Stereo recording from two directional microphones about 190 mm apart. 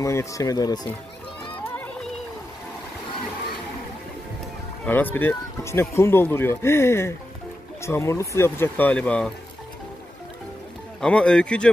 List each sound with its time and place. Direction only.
0.0 s speech: 15° left (ahead or behind)
1.6 s music: 10° left (ahead or behind)
4.8 s speech: 10° left (ahead or behind)
11.0 s speech: 5° left (ahead or behind)